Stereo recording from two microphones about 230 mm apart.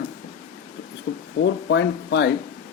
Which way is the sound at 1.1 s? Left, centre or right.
Left.